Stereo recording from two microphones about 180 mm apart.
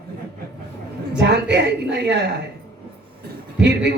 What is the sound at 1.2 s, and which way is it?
A woman's voice, 70° right (ahead or behind).